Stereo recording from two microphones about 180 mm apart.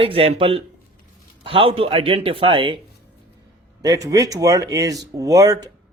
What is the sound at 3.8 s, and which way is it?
Speech, 20° right (ahead or behind).